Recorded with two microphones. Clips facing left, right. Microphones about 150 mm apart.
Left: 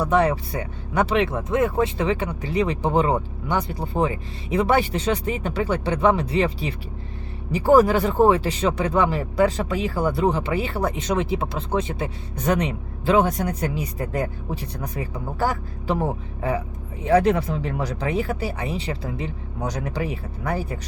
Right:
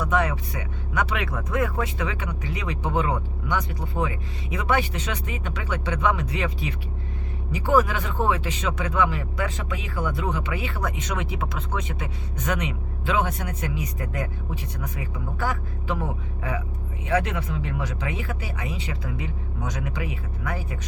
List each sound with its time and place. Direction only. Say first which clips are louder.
0.0 s speech: left 5 dB; 30° left (ahead or behind)